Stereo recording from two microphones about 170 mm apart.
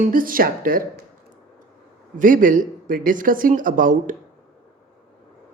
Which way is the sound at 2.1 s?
50° right (ahead or behind).